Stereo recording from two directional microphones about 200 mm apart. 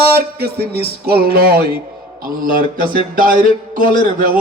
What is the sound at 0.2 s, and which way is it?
Speech, 55° right (ahead or behind).